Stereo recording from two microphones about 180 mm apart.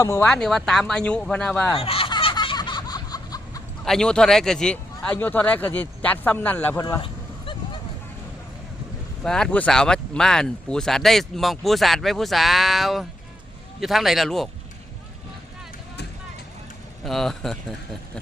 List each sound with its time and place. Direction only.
0.0 s a man's voice: 15° left (ahead or behind)
0.3 s speech: 5° left (ahead or behind)
1.8 s a sound: 30° left (ahead or behind)
3.8 s a man's voice: 5° left (ahead or behind)
7.0 s a sound: 30° left (ahead or behind)
9.2 s speech: 5° left (ahead or behind)
17.1 s speech: centre (ahead or behind)